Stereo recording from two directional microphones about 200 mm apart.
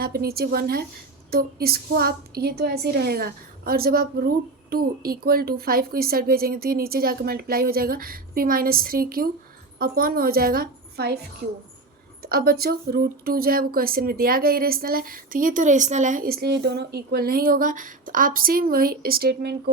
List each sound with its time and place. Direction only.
0.0 s speech: 50° right (ahead or behind)
12.2 s speech: 50° right (ahead or behind)